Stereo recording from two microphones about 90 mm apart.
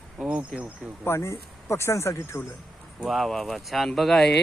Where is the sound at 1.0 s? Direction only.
30° left (ahead or behind).